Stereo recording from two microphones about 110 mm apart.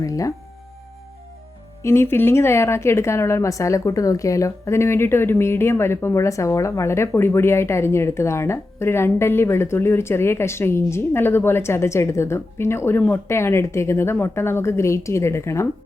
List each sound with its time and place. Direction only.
0.0 s speech: 30° left (ahead or behind)
1.8 s a woman's voice: 25° left (ahead or behind)